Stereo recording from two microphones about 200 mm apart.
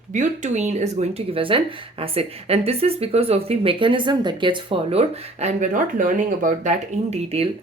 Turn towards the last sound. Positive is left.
turn(degrees=-30)  # may be behind; listen again after turning